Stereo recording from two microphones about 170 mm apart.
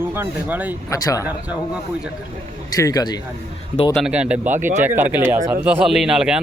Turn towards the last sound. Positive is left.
turn(degrees=-5)  # may be behind; listen again after turning